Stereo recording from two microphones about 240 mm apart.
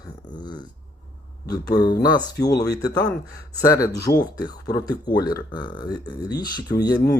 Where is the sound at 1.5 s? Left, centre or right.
Centre.